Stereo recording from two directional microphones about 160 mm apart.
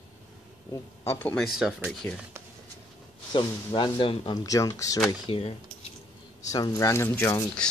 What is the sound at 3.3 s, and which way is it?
Speech, 30° left (ahead or behind).